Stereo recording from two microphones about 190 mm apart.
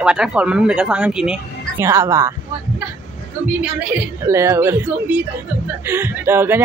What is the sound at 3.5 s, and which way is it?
A woman's voice, 10° right (ahead or behind).